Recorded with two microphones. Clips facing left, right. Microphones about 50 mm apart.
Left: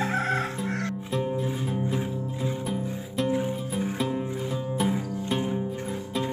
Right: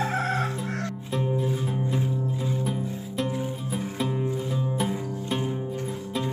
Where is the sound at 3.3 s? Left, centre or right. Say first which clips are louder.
Left 4 dB; left.